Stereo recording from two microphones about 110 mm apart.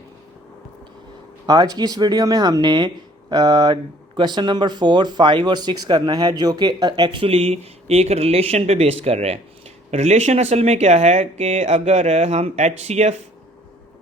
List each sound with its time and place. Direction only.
1.5 s speech: 35° right (ahead or behind); by 9.4 s 70° right (ahead or behind)
9.9 s speech: 80° right